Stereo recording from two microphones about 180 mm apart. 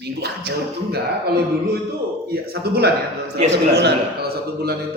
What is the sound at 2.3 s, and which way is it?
A man's voice, 60° right (ahead or behind).